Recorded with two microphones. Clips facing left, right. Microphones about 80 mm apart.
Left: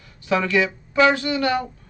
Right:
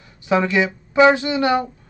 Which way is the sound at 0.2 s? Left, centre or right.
Centre.